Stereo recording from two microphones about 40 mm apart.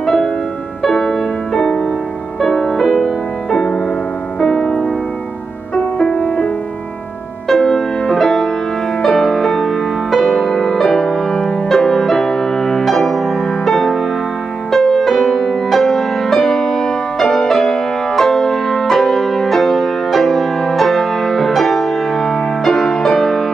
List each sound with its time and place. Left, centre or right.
0.0 s music: centre
5.9 s music: left
7.4 s music: centre